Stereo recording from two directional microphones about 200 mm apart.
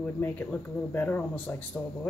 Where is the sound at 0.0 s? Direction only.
10° left (ahead or behind).